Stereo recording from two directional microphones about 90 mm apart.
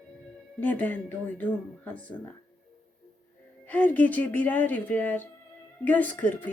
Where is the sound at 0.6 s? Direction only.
20° left (ahead or behind).